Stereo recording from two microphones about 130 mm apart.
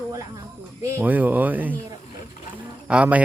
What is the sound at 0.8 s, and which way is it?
Speech, 15° right (ahead or behind).